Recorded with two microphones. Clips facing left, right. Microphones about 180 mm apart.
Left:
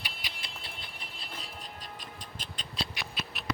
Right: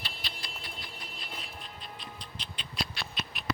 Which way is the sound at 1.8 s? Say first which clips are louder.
Even; 45° left (ahead or behind).